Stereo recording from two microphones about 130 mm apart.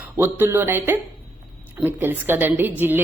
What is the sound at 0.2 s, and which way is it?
A woman's voice, 15° right (ahead or behind).